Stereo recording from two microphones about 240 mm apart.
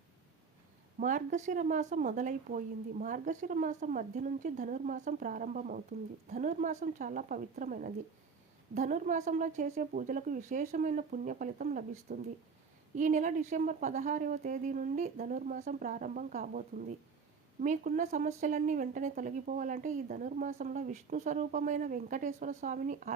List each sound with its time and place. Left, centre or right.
0.9 s speech: right